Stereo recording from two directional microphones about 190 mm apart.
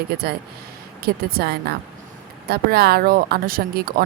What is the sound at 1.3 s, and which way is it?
Speech, 55° right (ahead or behind).